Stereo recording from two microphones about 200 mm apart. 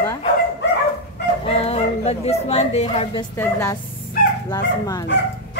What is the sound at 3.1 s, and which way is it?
A woman's voice, 15° left (ahead or behind).